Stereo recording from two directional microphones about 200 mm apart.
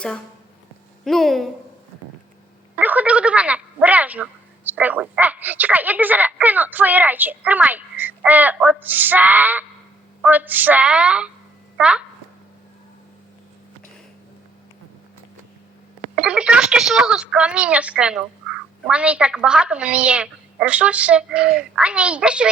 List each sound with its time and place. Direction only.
1.0 s speech: centre (ahead or behind)
2.7 s speech: 10° right (ahead or behind)
16.1 s speech: 5° right (ahead or behind)